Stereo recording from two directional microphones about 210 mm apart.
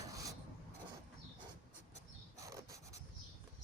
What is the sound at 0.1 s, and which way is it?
Filing, 15° right (ahead or behind).